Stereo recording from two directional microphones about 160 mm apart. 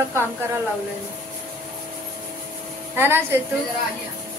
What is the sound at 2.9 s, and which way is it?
Speech, 15° right (ahead or behind).